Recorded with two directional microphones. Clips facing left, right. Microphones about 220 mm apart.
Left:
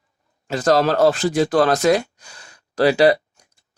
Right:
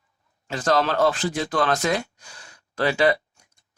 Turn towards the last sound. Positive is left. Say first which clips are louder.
# left 6 dB
turn(degrees=35)  # may be behind; listen again after turning